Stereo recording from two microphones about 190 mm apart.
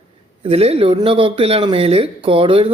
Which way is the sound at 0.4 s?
30° right (ahead or behind).